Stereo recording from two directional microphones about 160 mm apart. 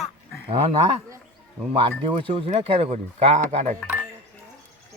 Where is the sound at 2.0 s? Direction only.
35° right (ahead or behind).